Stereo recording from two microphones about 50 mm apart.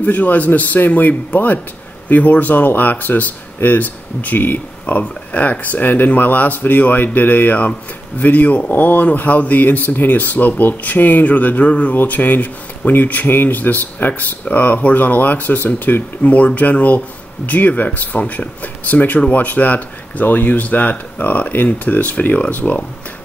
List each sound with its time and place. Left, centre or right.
0.0 s speech: left
11.9 s speech: left